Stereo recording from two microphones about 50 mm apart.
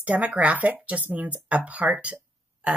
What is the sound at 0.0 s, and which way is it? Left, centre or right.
Speech, right.